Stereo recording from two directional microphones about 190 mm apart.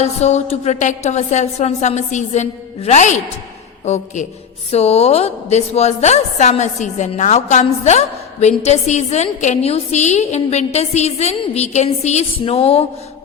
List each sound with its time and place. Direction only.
0.0 s a woman's voice: 35° left (ahead or behind)